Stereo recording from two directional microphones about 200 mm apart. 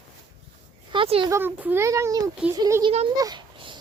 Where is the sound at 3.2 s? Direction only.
20° right (ahead or behind).